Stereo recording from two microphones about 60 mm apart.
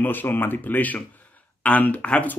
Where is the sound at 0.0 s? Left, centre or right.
Left.